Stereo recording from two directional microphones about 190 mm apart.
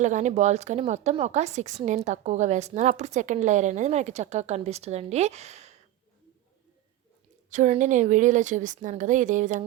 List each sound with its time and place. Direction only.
0.0 s speech: 40° right (ahead or behind)
7.5 s speech: 40° right (ahead or behind)